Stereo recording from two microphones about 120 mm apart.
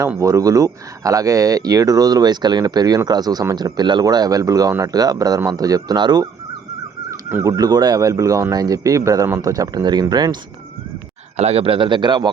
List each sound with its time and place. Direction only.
0.2 s speech: 25° right (ahead or behind)
7.1 s a sound: 20° right (ahead or behind)
7.5 s speech: 35° right (ahead or behind)
11.3 s a man's voice: 60° right (ahead or behind); by 12.3 s 40° right (ahead or behind)